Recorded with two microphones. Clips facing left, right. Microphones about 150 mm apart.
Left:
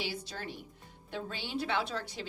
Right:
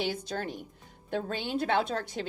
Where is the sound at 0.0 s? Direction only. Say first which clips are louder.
Right 7 dB; 50° right (ahead or behind).